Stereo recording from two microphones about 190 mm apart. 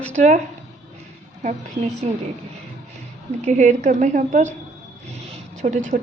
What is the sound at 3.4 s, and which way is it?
A woman's voice, 40° right (ahead or behind).